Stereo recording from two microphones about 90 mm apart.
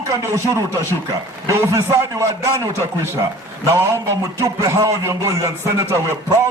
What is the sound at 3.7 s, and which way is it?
Speech, 35° right (ahead or behind).